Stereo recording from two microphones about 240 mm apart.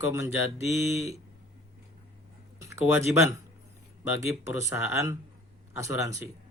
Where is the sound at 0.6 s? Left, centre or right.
Centre.